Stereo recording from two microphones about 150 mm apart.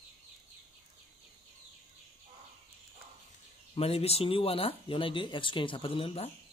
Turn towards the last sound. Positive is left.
turn(degrees=40)  # may be behind; listen again after turning